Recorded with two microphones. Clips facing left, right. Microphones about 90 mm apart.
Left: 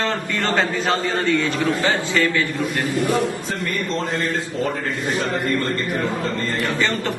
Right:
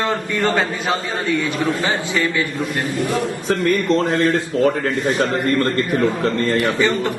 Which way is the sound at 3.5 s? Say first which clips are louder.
Right 8 dB; 60° right (ahead or behind).